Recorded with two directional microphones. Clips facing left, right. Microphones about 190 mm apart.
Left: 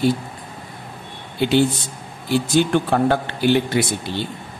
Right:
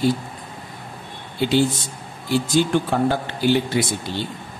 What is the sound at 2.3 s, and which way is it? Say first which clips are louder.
Speech: left 1 dB; 60° left (ahead or behind).